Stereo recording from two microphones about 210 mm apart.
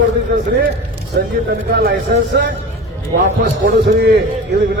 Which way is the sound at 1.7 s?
50° right (ahead or behind).